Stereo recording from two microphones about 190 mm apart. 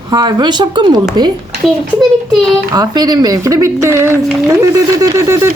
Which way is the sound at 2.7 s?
20° right (ahead or behind).